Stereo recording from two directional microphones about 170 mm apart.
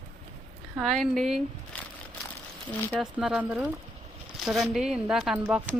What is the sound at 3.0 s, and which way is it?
Speech, 5° right (ahead or behind).